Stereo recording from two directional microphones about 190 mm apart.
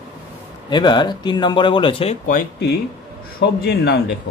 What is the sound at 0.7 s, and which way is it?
Speech, 25° left (ahead or behind).